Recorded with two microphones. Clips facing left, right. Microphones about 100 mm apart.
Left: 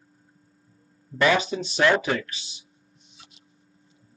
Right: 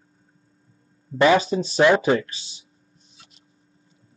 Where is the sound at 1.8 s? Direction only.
25° right (ahead or behind).